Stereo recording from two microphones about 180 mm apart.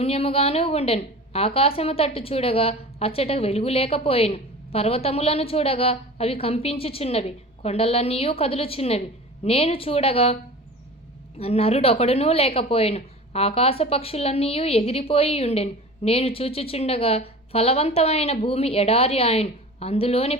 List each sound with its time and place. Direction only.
0.0 s a woman's voice: 35° left (ahead or behind)
11.3 s a woman's voice: 35° left (ahead or behind)